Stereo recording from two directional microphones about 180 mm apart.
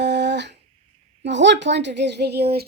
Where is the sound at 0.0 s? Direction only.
70° right (ahead or behind).